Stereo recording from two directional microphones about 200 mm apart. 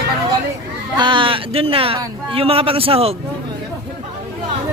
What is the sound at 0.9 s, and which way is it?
Speech, 25° right (ahead or behind).